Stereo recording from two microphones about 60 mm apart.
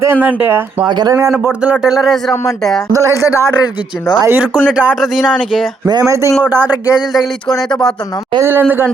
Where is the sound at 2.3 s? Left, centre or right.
Left.